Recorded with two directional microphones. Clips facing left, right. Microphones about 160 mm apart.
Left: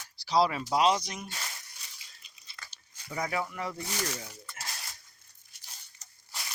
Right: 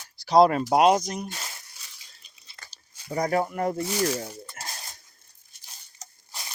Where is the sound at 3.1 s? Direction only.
40° right (ahead or behind).